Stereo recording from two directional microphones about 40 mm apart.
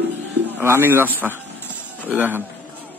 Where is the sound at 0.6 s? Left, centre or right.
Right.